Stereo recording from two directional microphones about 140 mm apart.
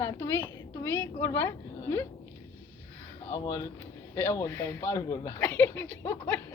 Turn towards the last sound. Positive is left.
turn(degrees=10)  # may be behind; listen again after turning